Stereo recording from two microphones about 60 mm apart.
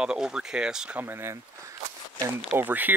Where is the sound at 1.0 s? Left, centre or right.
Right.